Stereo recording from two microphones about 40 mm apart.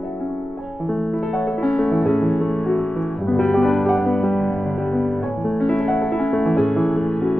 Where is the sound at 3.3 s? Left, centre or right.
Left.